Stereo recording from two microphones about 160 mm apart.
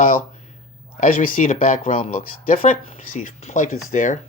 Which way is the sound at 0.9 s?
55° left (ahead or behind).